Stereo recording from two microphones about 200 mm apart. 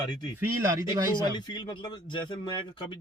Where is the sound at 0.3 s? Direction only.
15° right (ahead or behind).